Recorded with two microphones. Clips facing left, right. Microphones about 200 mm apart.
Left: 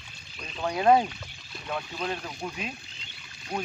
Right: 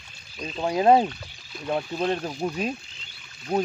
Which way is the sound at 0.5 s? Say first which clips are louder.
Right 3 dB; 30° right (ahead or behind).